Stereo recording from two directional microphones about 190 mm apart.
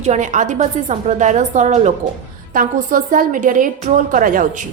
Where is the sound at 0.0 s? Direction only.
40° right (ahead or behind).